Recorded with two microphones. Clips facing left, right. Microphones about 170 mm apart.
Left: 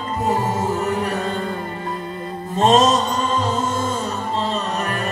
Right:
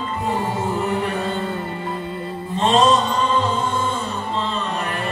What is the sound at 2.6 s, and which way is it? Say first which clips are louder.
Music: left 1 dB; 40° left (ahead or behind).